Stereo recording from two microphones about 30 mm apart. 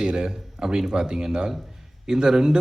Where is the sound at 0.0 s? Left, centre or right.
Right.